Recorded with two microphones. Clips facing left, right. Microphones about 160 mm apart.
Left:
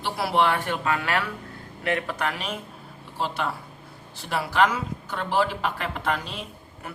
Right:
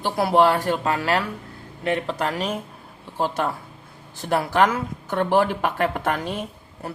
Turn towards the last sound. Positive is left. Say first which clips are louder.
# right 6 dB
turn(degrees=-35)  # may be behind; listen again after turning